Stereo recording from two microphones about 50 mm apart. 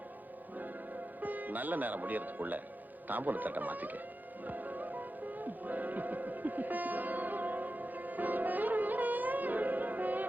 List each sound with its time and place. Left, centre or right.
1.2 s speech: right
4.4 s music: right